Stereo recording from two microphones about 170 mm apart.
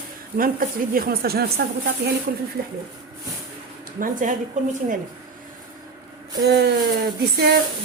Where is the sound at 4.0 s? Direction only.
50° right (ahead or behind).